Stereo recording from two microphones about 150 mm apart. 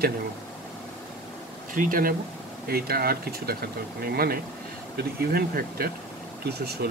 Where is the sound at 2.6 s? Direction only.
90° right.